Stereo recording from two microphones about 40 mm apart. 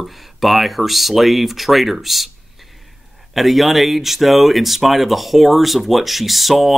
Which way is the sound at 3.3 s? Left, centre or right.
Centre.